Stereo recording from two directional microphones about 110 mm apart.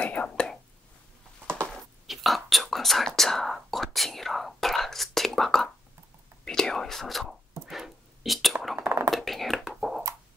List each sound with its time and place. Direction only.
0.0 s whispering: 10° left (ahead or behind)
2.0 s whispering: centre (ahead or behind)
8.7 s a sound: 25° right (ahead or behind)
9.1 s beatboxing: centre (ahead or behind)